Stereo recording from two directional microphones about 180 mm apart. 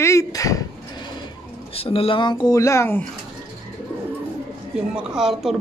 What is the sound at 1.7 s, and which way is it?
Speech, 30° left (ahead or behind).